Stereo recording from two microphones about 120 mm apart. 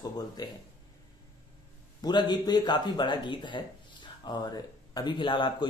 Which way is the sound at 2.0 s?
35° left (ahead or behind).